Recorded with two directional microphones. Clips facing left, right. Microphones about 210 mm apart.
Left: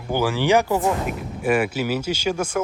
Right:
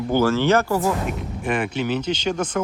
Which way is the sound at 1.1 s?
5° left (ahead or behind).